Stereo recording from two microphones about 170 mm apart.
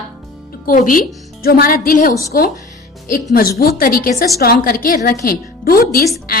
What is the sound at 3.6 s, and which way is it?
A woman's voice, 60° left (ahead or behind).